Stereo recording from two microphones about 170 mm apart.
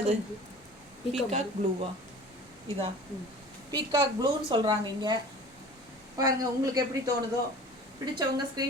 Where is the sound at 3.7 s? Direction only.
25° right (ahead or behind).